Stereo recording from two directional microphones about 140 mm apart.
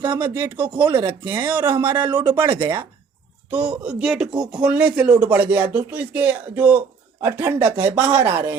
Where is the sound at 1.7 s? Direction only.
30° right (ahead or behind).